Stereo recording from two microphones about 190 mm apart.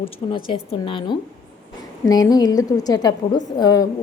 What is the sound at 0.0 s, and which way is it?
A woman's voice, 25° left (ahead or behind).